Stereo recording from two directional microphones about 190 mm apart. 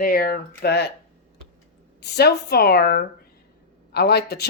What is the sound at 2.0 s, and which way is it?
Speech, 60° left (ahead or behind).